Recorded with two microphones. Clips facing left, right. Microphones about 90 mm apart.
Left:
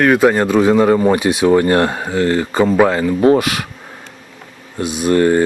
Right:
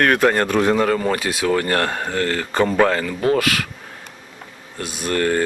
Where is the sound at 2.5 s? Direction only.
5° left (ahead or behind).